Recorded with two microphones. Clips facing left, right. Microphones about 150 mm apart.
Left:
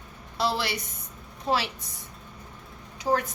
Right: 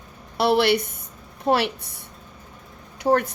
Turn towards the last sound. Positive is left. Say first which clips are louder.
# right 6 dB
turn(degrees=-60)  # may be behind; listen again after turning